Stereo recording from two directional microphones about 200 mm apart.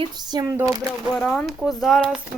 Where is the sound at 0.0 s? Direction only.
20° right (ahead or behind).